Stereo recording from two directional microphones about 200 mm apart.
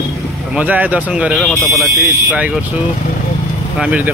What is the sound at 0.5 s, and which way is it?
Speech, 10° right (ahead or behind).